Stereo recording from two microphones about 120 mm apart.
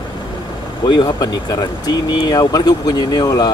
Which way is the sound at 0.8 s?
40° left (ahead or behind).